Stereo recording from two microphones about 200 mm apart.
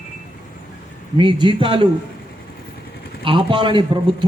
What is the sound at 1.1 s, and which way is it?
Speech, 25° right (ahead or behind).